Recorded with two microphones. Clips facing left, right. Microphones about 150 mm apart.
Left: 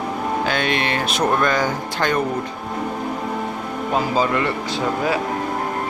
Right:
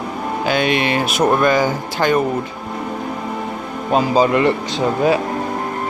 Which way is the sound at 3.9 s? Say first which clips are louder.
Right 6 dB; 20° right (ahead or behind).